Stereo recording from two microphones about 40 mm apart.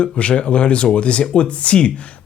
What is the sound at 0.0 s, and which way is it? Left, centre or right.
Speech, left.